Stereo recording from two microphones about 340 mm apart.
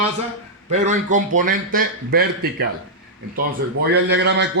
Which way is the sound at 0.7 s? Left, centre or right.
Right.